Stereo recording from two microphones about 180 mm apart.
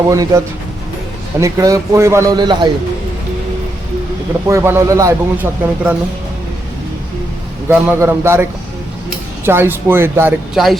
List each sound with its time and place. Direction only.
0.1 s a man's voice: 20° right (ahead or behind)
4.4 s speech: 15° right (ahead or behind)
7.7 s speech: 10° right (ahead or behind)
9.5 s speech: 10° right (ahead or behind)
10.5 s speech: centre (ahead or behind)